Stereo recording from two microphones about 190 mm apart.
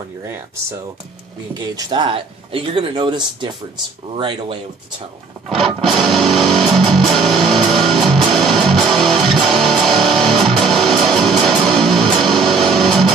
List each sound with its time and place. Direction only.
1.5 s speech: 25° right (ahead or behind)
5.5 s music: centre (ahead or behind)